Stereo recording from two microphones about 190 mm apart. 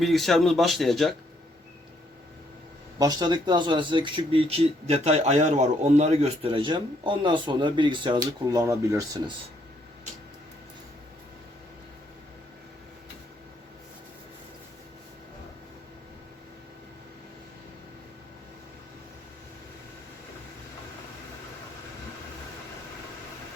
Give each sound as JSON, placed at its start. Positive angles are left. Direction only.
{"t": 0.0, "sound": "speech", "side_deg": 0}
{"t": 3.0, "sound": "speech", "side_deg": -20}